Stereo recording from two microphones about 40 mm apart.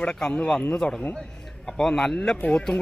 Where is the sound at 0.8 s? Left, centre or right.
Centre.